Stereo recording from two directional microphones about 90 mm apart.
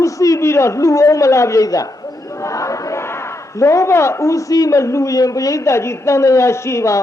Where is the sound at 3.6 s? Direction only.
35° left (ahead or behind).